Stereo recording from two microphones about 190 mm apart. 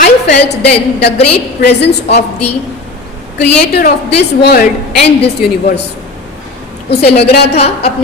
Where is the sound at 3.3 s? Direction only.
60° left (ahead or behind).